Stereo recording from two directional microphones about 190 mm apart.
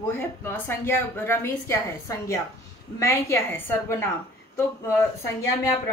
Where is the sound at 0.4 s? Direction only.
10° left (ahead or behind).